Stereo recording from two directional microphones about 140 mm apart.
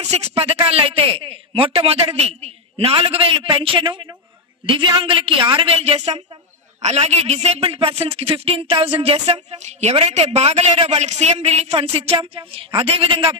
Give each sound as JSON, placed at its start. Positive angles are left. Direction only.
{"t": 0.1, "sound": "a man's voice", "side_deg": -50}